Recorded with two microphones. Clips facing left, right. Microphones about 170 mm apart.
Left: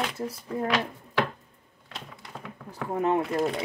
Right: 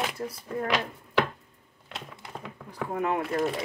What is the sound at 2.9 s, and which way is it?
Speech, 25° left (ahead or behind).